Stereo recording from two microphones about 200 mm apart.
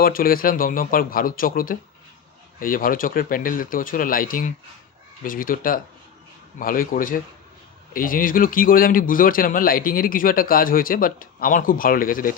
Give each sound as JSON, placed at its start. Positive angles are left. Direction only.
{"t": 0.0, "sound": "speech", "side_deg": 45}